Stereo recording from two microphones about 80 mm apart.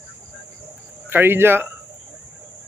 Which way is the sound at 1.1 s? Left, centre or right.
Right.